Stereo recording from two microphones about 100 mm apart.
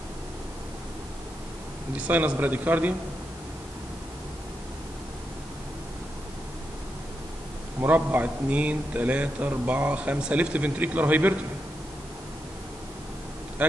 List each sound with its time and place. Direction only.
2.0 s a man's voice: 15° right (ahead or behind)
7.8 s a man's voice: 20° right (ahead or behind)
13.6 s speech: 15° right (ahead or behind)